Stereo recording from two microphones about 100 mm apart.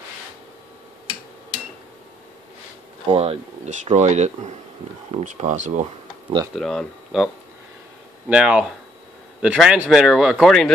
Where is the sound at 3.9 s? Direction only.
50° right (ahead or behind).